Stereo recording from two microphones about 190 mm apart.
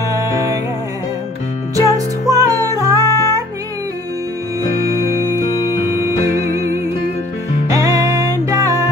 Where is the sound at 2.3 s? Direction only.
15° right (ahead or behind).